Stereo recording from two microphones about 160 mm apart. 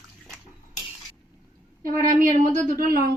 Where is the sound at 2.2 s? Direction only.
55° right (ahead or behind).